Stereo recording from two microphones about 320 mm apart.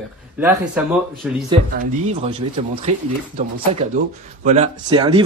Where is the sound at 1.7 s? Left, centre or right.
Right.